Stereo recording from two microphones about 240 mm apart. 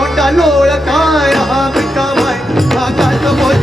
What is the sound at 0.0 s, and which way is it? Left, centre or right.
Music, centre.